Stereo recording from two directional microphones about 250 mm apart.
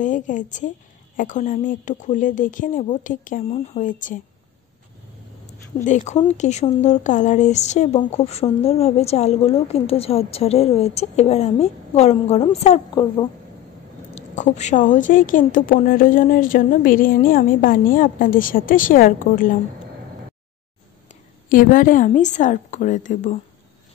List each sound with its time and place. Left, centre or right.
0.0 s a woman's voice: left
5.9 s a woman's voice: left
21.1 s a woman's voice: left